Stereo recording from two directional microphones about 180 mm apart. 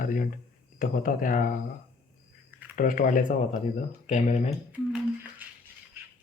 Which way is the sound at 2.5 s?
10° right (ahead or behind).